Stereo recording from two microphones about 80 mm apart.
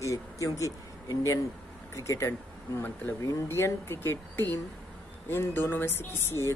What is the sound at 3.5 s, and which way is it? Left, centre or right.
A man's voice, left.